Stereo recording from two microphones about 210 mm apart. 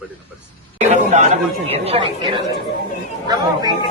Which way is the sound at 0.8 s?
35° right (ahead or behind).